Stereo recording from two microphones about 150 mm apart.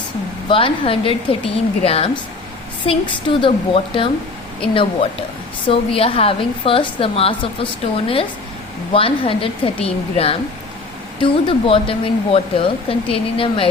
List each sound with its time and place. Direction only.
0.4 s a woman's voice: 35° left (ahead or behind)